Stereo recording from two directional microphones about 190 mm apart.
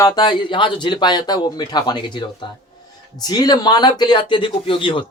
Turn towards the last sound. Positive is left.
turn(degrees=25)  # may be behind; listen again after turning